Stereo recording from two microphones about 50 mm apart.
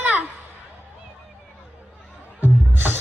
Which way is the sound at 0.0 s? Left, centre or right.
Right.